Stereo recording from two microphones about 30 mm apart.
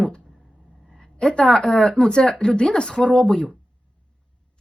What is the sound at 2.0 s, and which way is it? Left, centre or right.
Speech, left.